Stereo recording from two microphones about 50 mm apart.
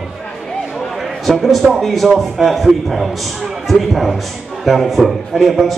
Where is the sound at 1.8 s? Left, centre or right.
Centre.